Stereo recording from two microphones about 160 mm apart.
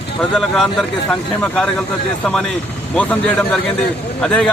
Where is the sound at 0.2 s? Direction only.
5° left (ahead or behind).